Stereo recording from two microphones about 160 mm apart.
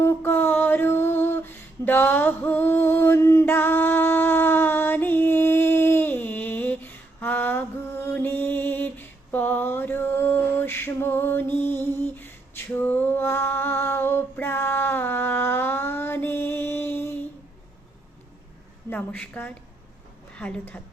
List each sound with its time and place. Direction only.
0.0 s female singing: 15° left (ahead or behind)
18.9 s a sound: 10° left (ahead or behind)
20.3 s a woman's voice: 5° left (ahead or behind)